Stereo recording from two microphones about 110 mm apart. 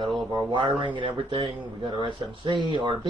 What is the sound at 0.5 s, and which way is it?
Speech, 50° right (ahead or behind).